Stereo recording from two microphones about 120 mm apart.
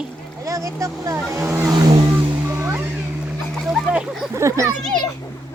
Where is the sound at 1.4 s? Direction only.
20° right (ahead or behind).